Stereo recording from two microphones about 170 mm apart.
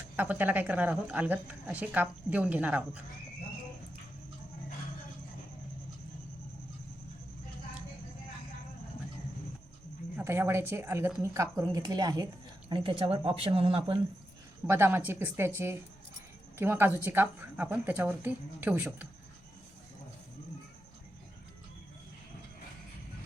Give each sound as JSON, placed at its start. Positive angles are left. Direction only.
{"t": 0.2, "sound": "speech", "side_deg": -10}
{"t": 10.2, "sound": "speech", "side_deg": -15}
{"t": 14.7, "sound": "speech", "side_deg": -15}